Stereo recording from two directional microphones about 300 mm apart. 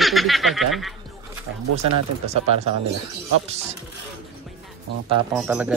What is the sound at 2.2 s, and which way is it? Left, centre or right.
Speech, right.